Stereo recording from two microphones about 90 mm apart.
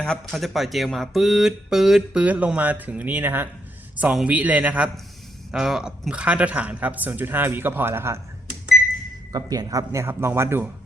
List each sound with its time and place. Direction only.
0.0 s speech: 10° left (ahead or behind); by 3.5 s 20° right (ahead or behind)
4.1 s a man's voice: 10° right (ahead or behind); by 8.2 s 25° right (ahead or behind)
9.3 s speech: 45° right (ahead or behind)
9.9 s speech: 30° right (ahead or behind)